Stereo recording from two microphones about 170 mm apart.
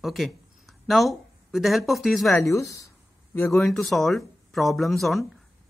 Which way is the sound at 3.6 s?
Centre (ahead or behind).